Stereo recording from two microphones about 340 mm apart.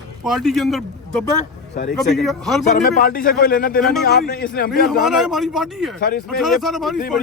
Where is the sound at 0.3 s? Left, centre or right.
Centre.